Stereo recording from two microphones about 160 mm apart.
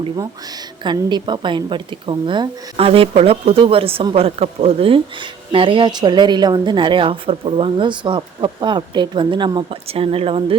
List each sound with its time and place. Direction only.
0.9 s speech: 30° right (ahead or behind)